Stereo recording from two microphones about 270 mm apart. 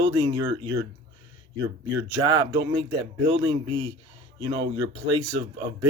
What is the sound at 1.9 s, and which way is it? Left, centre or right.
Speech, centre.